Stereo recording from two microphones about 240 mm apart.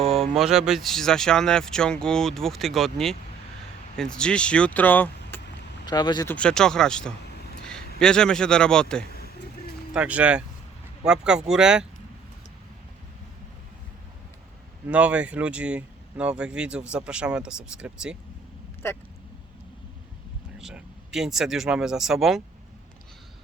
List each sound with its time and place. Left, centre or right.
0.0 s speech: centre
6.3 s speech: centre
9.1 s vehicle: left
9.9 s speech: centre
14.8 s speech: centre
18.8 s speech: centre
20.6 s speech: centre